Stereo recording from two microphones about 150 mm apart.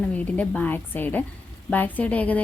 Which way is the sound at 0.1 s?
10° left (ahead or behind).